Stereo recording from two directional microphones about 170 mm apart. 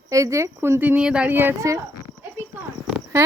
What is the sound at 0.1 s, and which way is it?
Speech, 20° right (ahead or behind).